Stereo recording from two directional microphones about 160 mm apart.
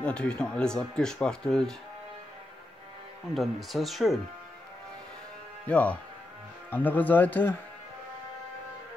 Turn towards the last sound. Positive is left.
turn(degrees=10)  # may be behind; listen again after turning